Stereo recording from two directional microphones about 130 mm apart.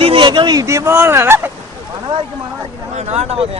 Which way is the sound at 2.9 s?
55° right (ahead or behind).